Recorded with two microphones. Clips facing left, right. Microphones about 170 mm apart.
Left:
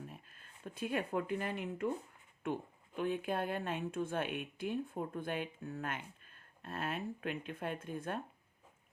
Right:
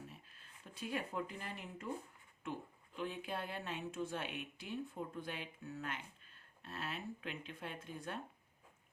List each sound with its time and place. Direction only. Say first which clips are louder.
0.1 s speech: left 4 dB; 50° left (ahead or behind)